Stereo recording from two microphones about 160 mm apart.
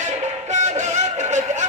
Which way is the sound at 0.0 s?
50° right (ahead or behind).